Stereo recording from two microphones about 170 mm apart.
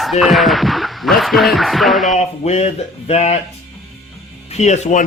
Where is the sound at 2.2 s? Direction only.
40° left (ahead or behind).